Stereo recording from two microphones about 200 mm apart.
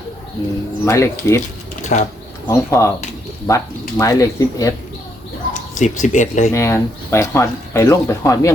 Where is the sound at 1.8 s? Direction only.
35° left (ahead or behind).